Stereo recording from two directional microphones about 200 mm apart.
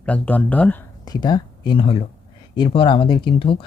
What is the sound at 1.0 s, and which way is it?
Speech, 20° left (ahead or behind).